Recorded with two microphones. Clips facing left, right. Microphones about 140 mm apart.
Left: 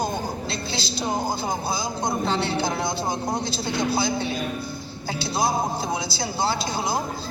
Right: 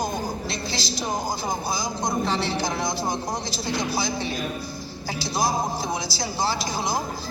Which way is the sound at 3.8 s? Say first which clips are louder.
Left 3 dB; 25° left (ahead or behind).